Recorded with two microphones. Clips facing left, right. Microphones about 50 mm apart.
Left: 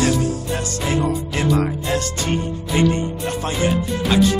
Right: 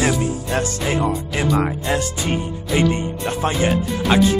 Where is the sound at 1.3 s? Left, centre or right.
Centre.